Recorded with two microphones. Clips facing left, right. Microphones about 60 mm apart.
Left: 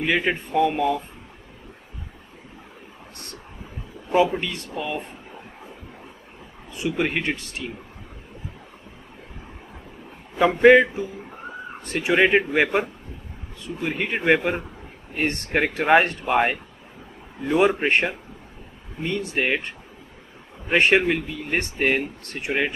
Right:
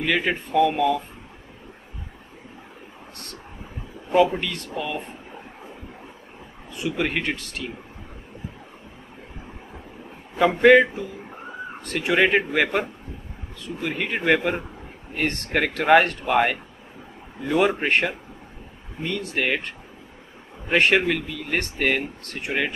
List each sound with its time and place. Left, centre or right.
0.0 s a man's voice: centre
0.6 s speech: centre
4.1 s a man's voice: centre
6.7 s a man's voice: centre
10.8 s a man's voice: centre
19.0 s a man's voice: centre
21.3 s a man's voice: centre